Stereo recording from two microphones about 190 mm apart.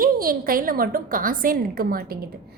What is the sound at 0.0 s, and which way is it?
A woman's voice, 50° right (ahead or behind).